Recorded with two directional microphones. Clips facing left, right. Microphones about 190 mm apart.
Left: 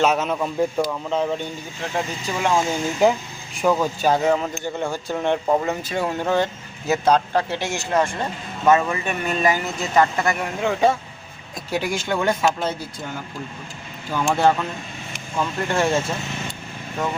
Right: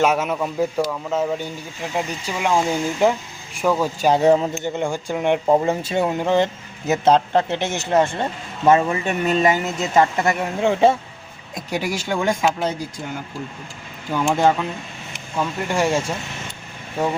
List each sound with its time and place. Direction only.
0.0 s a man's voice: 10° right (ahead or behind)
3.0 s speech: centre (ahead or behind)
4.2 s speech: 30° right (ahead or behind)
11.5 s speech: 10° right (ahead or behind)
14.1 s speech: 15° right (ahead or behind)